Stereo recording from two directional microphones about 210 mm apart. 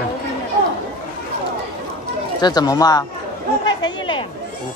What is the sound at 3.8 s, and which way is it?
Chatter, 20° left (ahead or behind).